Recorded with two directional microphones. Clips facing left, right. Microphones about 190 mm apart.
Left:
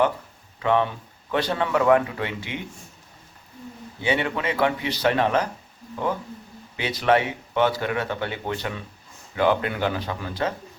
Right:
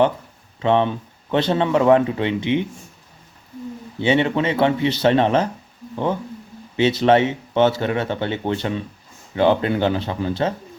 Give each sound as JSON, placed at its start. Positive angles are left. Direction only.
{"t": 0.6, "sound": "speech", "side_deg": -25}
{"t": 4.0, "sound": "speech", "side_deg": -25}
{"t": 6.7, "sound": "speech", "side_deg": -25}